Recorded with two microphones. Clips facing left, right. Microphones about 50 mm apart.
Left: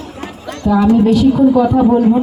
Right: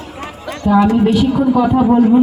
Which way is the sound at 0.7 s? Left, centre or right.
Right.